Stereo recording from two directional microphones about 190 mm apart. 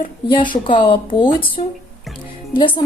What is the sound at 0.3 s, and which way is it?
A woman's voice, 25° left (ahead or behind).